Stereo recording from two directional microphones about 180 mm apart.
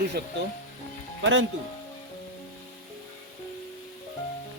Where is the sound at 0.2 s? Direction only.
65° right (ahead or behind).